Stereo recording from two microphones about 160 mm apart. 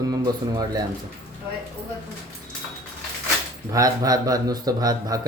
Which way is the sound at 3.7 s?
20° right (ahead or behind).